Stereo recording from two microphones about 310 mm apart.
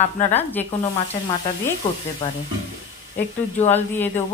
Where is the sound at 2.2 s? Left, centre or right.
Centre.